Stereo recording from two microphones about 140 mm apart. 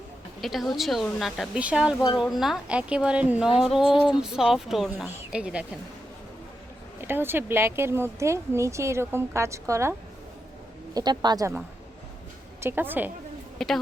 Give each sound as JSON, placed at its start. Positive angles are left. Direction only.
{"t": 0.4, "sound": "a woman's voice", "side_deg": 0}
{"t": 7.0, "sound": "speech", "side_deg": -15}
{"t": 10.9, "sound": "a woman's voice", "side_deg": -30}
{"t": 12.5, "sound": "a woman's voice", "side_deg": -15}
{"t": 13.6, "sound": "speech", "side_deg": 0}